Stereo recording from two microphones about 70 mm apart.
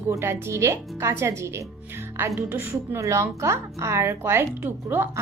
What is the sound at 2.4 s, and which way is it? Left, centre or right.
Speech, right.